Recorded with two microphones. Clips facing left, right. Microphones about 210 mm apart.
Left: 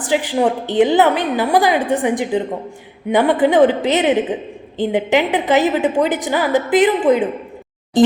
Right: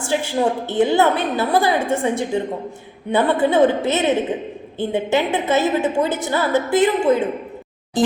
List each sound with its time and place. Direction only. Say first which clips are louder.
0.0 s a woman's voice: left 3 dB; 15° left (ahead or behind)